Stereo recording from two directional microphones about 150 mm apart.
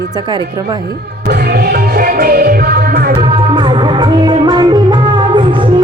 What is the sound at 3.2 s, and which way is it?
Music, 30° right (ahead or behind).